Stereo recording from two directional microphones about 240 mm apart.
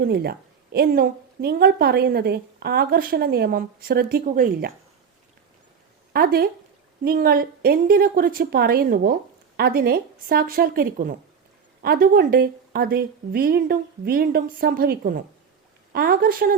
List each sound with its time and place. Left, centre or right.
0.0 s a woman's voice: right
6.1 s a woman's voice: right